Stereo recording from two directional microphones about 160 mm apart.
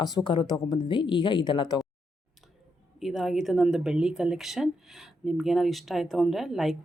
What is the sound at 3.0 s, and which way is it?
Speech, centre (ahead or behind).